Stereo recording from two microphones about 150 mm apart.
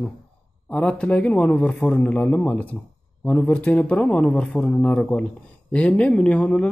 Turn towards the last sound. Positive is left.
turn(degrees=5)  # may be behind; listen again after turning